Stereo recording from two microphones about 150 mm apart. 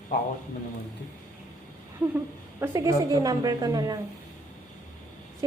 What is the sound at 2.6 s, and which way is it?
A woman's voice, 20° right (ahead or behind).